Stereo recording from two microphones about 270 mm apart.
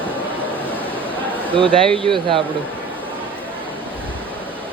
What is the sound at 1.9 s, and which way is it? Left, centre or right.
Speech, centre.